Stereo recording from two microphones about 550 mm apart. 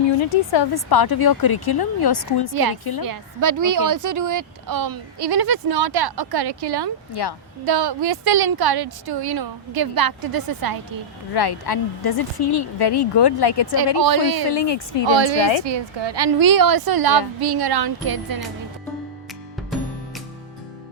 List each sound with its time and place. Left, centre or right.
0.2 s speech: left
3.0 s a woman's voice: right
7.1 s a woman's voice: left
7.6 s a woman's voice: right
11.3 s a woman's voice: left
14.0 s a woman's voice: right
14.5 s a woman's voice: left
15.0 s a woman's voice: right